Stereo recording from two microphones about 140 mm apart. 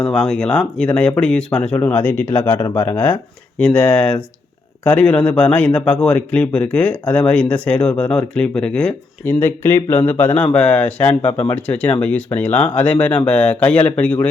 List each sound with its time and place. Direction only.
0.1 s speech: 5° left (ahead or behind)